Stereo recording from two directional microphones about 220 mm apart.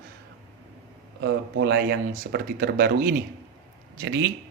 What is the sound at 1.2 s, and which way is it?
A man's voice, 50° right (ahead or behind).